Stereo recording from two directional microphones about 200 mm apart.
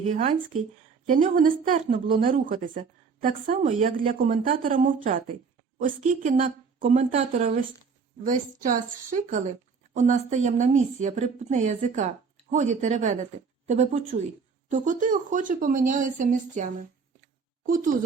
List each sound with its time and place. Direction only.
0.0 s a woman's voice: 35° right (ahead or behind)